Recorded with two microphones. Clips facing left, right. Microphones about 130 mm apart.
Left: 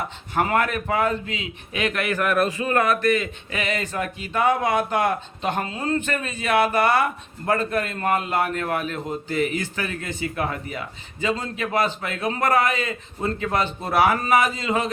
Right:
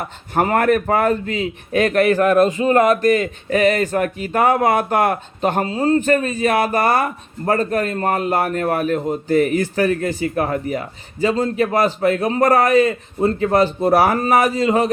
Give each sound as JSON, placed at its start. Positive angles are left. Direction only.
{"t": 0.3, "sound": "a man's voice", "side_deg": -45}
{"t": 5.6, "sound": "speech", "side_deg": -35}